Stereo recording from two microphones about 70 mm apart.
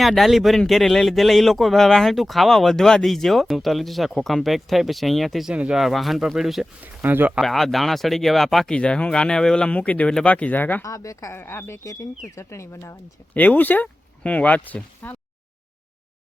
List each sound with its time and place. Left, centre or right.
0.0 s speech: centre
5.5 s speech: centre
5.8 s speech: centre
7.0 s speech: right
7.4 s speech: centre
8.7 s speech: centre
10.8 s speech: left
11.3 s speech: left
13.3 s speech: left